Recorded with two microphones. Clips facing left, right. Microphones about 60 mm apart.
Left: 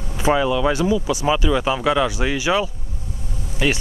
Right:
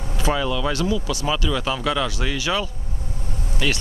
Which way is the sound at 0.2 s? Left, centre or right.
Centre.